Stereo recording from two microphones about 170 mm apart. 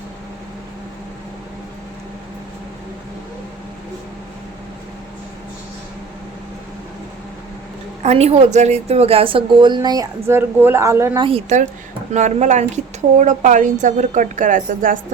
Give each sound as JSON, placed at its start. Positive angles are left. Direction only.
{"t": 8.0, "sound": "a woman's voice", "side_deg": -40}
{"t": 11.2, "sound": "a woman's voice", "side_deg": -35}